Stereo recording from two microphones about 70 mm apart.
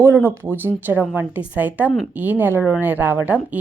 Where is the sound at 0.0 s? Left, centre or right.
Right.